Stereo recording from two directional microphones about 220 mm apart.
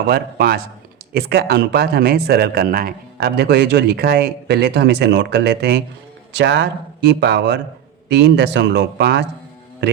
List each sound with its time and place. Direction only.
0.1 s speech: 45° right (ahead or behind)